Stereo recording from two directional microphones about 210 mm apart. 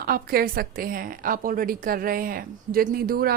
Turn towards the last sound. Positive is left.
turn(degrees=-45)  # may be behind; listen again after turning